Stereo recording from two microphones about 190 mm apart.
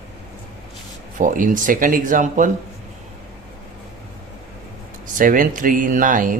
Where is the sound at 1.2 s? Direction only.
45° right (ahead or behind).